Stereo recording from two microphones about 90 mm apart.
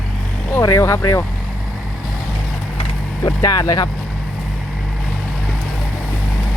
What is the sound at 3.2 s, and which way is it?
Speech, 40° left (ahead or behind).